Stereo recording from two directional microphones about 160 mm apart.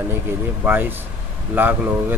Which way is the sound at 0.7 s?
15° right (ahead or behind).